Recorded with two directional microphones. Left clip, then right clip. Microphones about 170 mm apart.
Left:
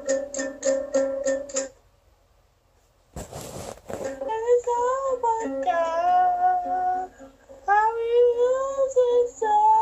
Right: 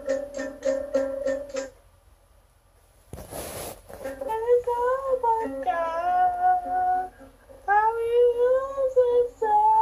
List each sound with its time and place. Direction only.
0.0 s music: 35° left (ahead or behind)
4.0 s child singing: 35° left (ahead or behind)